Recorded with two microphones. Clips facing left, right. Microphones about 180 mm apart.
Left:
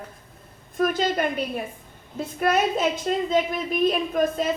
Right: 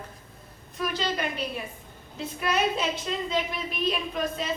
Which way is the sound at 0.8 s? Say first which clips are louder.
Left 7 dB; 50° left (ahead or behind).